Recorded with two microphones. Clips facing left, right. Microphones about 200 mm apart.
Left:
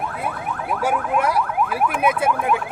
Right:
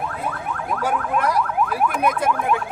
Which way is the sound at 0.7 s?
10° left (ahead or behind).